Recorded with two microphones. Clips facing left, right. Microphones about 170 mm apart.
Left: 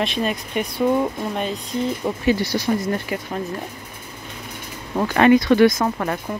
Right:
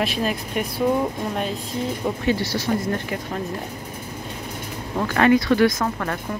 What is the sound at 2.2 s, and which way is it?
Speech, 15° left (ahead or behind).